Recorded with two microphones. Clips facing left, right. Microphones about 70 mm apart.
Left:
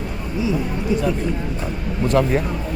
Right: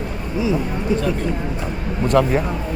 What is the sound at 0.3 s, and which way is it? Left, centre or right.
Speech, right.